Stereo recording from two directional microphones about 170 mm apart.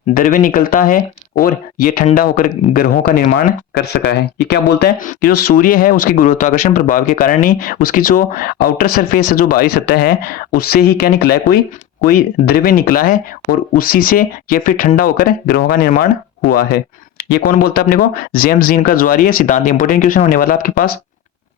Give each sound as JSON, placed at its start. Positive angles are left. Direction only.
{"t": 0.1, "sound": "speech", "side_deg": 55}